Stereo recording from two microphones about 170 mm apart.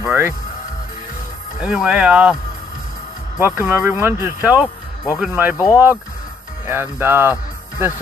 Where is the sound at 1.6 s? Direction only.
5° right (ahead or behind).